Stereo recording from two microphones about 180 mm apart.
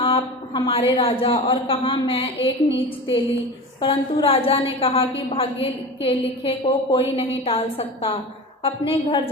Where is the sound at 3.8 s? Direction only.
30° left (ahead or behind).